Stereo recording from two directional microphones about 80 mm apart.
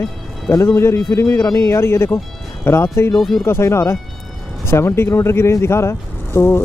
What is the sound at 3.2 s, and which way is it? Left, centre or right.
Speech, centre.